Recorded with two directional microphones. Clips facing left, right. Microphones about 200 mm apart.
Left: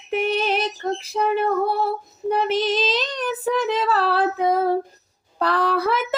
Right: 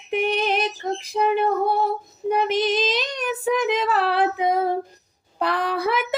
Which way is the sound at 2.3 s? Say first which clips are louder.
Even; 15° right (ahead or behind).